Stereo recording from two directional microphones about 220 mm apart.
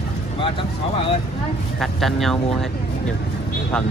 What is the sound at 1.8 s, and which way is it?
Speech, centre (ahead or behind).